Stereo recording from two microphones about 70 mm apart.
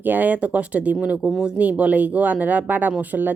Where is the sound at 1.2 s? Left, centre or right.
Centre.